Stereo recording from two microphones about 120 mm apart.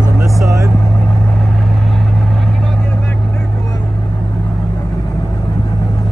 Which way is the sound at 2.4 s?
5° left (ahead or behind).